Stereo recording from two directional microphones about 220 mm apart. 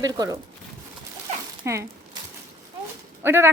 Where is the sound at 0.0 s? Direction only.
15° right (ahead or behind).